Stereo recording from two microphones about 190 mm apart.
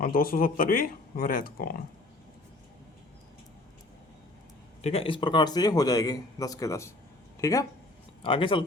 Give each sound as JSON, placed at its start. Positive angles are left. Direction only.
{"t": 0.0, "sound": "speech", "side_deg": 50}
{"t": 4.8, "sound": "a man's voice", "side_deg": 30}